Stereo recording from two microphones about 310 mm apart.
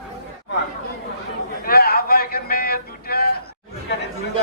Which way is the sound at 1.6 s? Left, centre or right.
Left.